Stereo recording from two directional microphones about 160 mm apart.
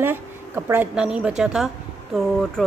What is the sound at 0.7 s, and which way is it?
Speech, 10° right (ahead or behind).